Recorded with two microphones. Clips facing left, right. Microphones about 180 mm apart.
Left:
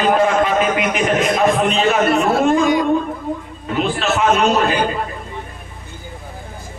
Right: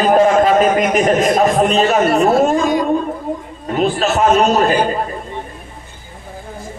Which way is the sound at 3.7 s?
40° right (ahead or behind).